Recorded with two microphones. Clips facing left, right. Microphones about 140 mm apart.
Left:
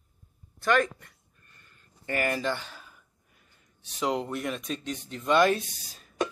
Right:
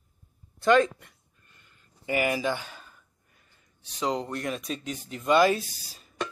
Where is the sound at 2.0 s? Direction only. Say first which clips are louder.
Right 2 dB; 10° right (ahead or behind).